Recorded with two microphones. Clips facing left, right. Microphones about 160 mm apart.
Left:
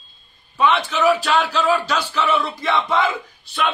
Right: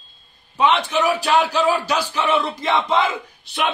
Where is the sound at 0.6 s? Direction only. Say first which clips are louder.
Even; 15° right (ahead or behind).